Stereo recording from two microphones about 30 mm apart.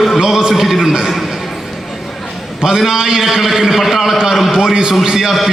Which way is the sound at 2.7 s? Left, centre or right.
Centre.